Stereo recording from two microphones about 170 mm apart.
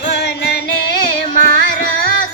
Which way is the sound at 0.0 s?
80° left.